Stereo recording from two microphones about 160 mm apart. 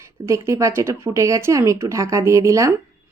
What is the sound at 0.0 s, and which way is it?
Speech, 20° right (ahead or behind).